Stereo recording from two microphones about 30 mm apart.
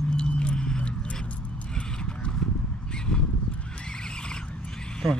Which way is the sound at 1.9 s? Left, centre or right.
Left.